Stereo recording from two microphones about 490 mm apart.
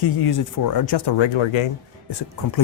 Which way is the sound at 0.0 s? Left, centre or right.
Left.